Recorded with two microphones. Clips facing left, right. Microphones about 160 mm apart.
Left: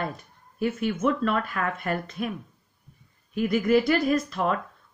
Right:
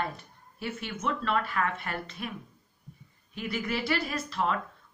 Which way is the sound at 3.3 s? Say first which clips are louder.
Left 11 dB; 45° left (ahead or behind).